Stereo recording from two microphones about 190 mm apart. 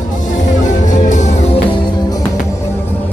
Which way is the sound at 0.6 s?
40° left (ahead or behind).